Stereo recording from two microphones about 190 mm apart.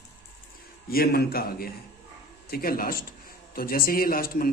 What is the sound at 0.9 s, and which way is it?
A man's voice, 50° left (ahead or behind).